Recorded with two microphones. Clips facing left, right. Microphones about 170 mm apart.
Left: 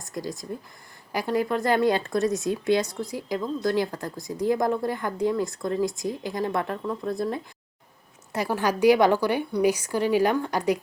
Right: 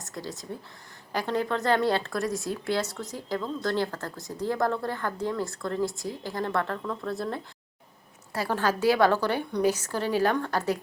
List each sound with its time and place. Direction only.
0.0 s speech: 15° left (ahead or behind)